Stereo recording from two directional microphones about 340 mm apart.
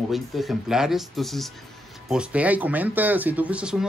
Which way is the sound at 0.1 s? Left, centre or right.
Centre.